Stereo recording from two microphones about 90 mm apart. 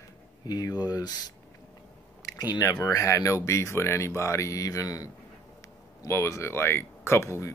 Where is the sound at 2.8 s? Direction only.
35° left (ahead or behind).